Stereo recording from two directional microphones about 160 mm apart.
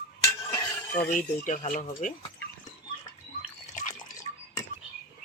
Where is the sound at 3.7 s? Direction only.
55° left (ahead or behind).